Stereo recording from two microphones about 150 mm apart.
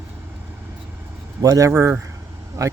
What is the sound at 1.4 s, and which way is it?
Speech, 20° right (ahead or behind).